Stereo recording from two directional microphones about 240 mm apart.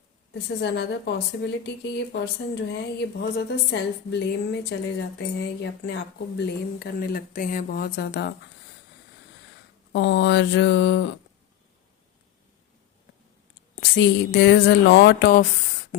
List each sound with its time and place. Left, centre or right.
0.6 s a woman's voice: left
9.9 s a woman's voice: left
13.9 s a woman's voice: left